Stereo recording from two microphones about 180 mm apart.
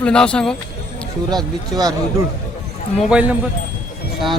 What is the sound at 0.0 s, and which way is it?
Speech, 5° left (ahead or behind).